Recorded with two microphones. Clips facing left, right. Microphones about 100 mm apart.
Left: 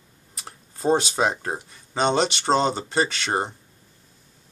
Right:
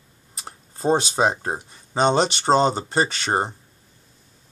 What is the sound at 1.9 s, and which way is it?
Speech, 35° right (ahead or behind).